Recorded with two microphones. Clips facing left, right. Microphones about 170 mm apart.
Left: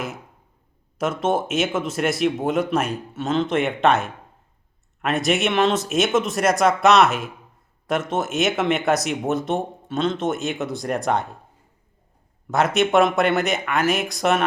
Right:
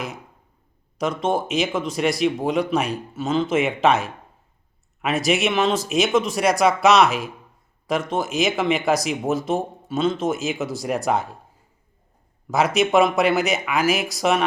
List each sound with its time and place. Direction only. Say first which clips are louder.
0.9 s speech: left 1 dB; 5° left (ahead or behind)
12.5 s speech: even; centre (ahead or behind)